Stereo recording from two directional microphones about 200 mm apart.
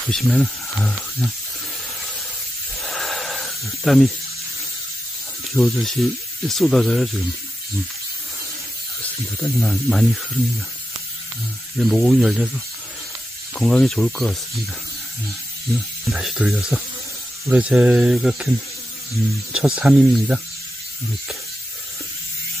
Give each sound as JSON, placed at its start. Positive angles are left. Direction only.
{"t": 0.1, "sound": "speech", "side_deg": 0}
{"t": 2.8, "sound": "snake", "side_deg": 0}
{"t": 5.5, "sound": "speech", "side_deg": 0}
{"t": 9.4, "sound": "speech", "side_deg": 5}
{"t": 11.9, "sound": "speech", "side_deg": 0}
{"t": 13.6, "sound": "speech", "side_deg": 5}
{"t": 16.1, "sound": "speech", "side_deg": 0}
{"t": 19.5, "sound": "speech", "side_deg": -5}